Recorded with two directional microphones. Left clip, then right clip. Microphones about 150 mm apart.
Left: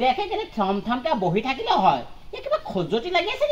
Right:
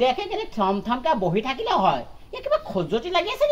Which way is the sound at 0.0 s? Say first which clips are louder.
Even; 20° right (ahead or behind).